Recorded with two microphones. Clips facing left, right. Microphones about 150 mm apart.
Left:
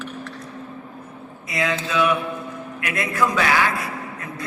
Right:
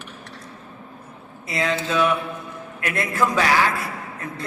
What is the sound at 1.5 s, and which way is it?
A man's voice, 35° right (ahead or behind).